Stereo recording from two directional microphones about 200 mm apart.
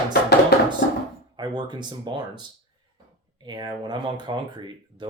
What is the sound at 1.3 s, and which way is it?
Speech, 20° right (ahead or behind).